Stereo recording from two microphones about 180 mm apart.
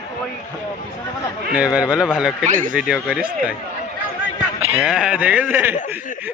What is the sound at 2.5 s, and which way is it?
Speech, 50° right (ahead or behind).